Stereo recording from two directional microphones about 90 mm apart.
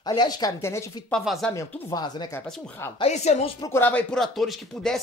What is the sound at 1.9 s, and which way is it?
Speech, 50° left (ahead or behind).